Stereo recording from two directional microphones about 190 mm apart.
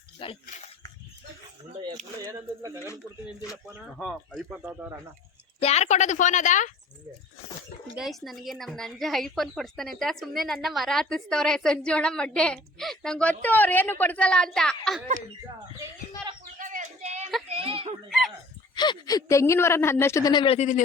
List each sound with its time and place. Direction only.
0.2 s speech: 30° left (ahead or behind)
2.2 s speech: 15° right (ahead or behind)
3.9 s a woman's voice: 5° left (ahead or behind)
4.6 s speech: 10° right (ahead or behind)
5.5 s a woman's voice: 35° left (ahead or behind)
7.9 s a woman's voice: centre (ahead or behind)
16.6 s a sound: 40° right (ahead or behind)
18.8 s speech: 20° left (ahead or behind); by 20.8 s 40° left (ahead or behind)